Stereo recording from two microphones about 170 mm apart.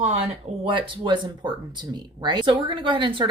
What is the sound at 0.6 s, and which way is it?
Speech, 30° right (ahead or behind).